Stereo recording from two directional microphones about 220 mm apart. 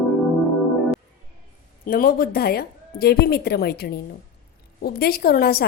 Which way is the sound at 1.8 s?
40° left (ahead or behind).